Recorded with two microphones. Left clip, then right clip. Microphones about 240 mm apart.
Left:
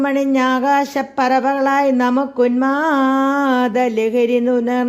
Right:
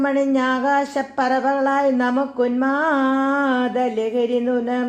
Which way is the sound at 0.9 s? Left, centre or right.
Left.